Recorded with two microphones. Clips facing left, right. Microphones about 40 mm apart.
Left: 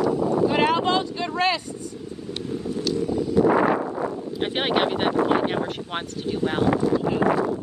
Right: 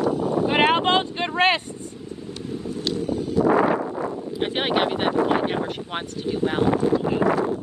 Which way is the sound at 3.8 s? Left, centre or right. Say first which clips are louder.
Even; centre.